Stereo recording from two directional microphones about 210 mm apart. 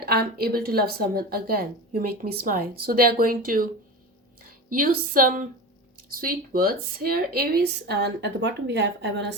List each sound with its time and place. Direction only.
0.0 s a woman's voice: 45° right (ahead or behind)
4.7 s a woman's voice: 40° right (ahead or behind); by 9.2 s 55° right (ahead or behind)